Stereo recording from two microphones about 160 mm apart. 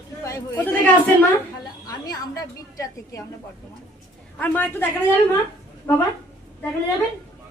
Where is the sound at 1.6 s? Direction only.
25° left (ahead or behind).